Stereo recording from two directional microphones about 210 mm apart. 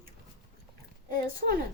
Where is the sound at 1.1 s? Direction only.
45° right (ahead or behind).